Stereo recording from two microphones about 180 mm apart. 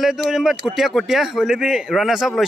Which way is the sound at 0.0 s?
Centre (ahead or behind).